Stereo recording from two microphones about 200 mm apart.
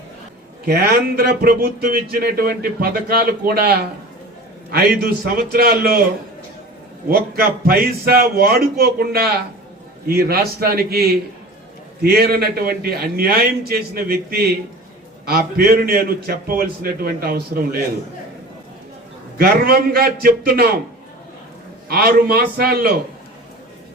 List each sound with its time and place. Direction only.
0.7 s speech: 50° right (ahead or behind)
7.1 s speech: 50° right (ahead or behind)
19.4 s speech: 50° right (ahead or behind)
21.8 s speech: 50° right (ahead or behind)